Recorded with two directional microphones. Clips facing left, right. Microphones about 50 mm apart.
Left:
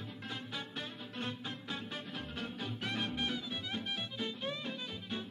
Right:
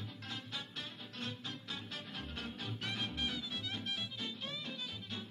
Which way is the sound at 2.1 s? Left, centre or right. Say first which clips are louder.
Left 3 dB; centre.